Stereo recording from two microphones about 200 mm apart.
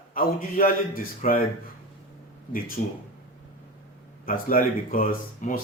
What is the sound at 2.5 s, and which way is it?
Speech, 45° left (ahead or behind).